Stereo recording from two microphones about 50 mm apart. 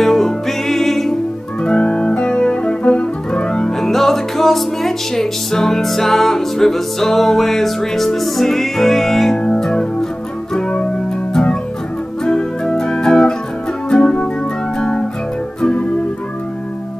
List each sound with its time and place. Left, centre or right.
0.0 s music: centre
1.6 s music: left
3.9 s music: centre
12.3 s organ: centre
13.8 s music: centre
15.6 s organ: left